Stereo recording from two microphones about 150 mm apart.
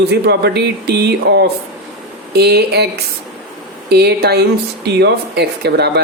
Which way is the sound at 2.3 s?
90° right.